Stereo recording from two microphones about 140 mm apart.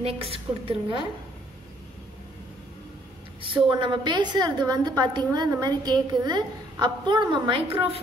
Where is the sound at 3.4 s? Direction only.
35° right (ahead or behind).